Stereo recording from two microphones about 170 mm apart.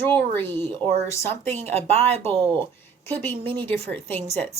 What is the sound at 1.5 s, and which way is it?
Speech, 40° right (ahead or behind).